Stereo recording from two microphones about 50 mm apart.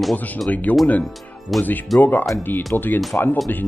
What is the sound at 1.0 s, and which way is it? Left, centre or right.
Speech, centre.